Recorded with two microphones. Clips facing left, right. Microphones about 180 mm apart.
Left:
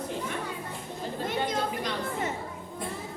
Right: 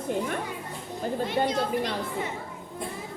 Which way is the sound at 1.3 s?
45° left (ahead or behind).